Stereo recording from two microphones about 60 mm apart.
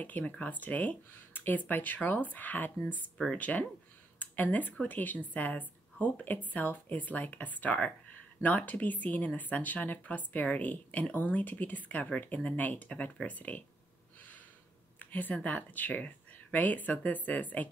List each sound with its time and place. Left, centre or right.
0.0 s speech: left
15.0 s speech: left